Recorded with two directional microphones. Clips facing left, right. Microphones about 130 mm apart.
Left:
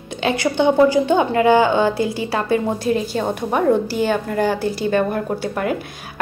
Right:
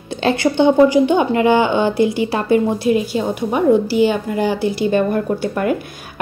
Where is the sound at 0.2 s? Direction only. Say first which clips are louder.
Right 3 dB; 25° right (ahead or behind).